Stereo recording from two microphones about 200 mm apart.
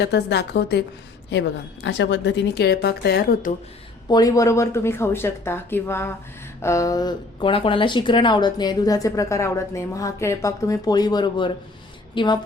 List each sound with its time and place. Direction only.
0.0 s a woman's voice: 55° left (ahead or behind)
4.1 s a woman's voice: 20° left (ahead or behind)